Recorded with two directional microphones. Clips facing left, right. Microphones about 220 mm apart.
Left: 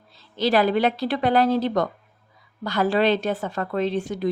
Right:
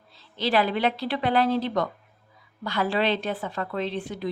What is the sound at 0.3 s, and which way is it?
A woman's voice, 45° left (ahead or behind).